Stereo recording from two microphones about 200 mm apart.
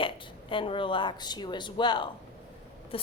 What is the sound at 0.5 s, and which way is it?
A woman's voice, 25° left (ahead or behind).